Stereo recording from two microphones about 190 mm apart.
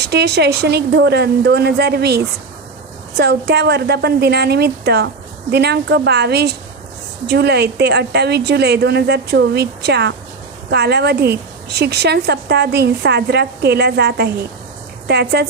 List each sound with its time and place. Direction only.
0.0 s a woman's voice: 60° right (ahead or behind)